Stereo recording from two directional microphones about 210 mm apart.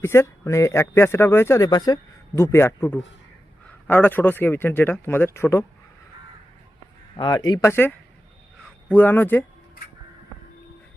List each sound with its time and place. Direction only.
0.0 s speech: 10° left (ahead or behind)
7.2 s speech: 20° left (ahead or behind)